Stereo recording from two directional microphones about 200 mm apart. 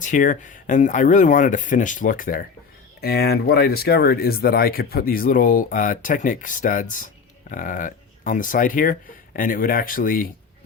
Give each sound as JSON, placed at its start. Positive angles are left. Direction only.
{"t": 0.0, "sound": "speech", "side_deg": 40}